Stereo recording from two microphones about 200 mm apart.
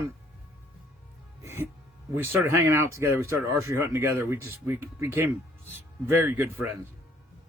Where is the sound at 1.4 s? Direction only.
10° right (ahead or behind).